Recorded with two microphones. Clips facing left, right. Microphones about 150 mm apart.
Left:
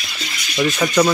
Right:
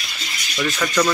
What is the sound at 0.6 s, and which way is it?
Speech, 20° left (ahead or behind).